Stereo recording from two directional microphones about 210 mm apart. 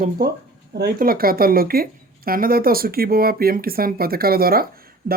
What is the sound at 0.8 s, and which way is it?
A woman's voice, 45° right (ahead or behind).